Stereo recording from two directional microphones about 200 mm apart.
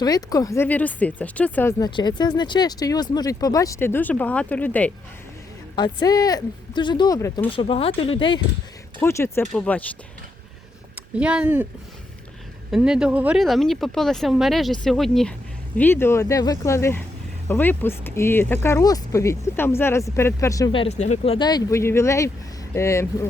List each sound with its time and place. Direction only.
0.0 s speech: 20° left (ahead or behind)
1.8 s speech: 20° left (ahead or behind)
5.7 s speech: 20° left (ahead or behind)
7.5 s speech: 25° left (ahead or behind)
9.0 s speech: 15° left (ahead or behind)
10.9 s speech: 5° right (ahead or behind)
12.7 s speech: 5° right (ahead or behind); by 20.8 s 15° left (ahead or behind)
20.8 s speech: 35° left (ahead or behind)
21.3 s speech: 20° left (ahead or behind)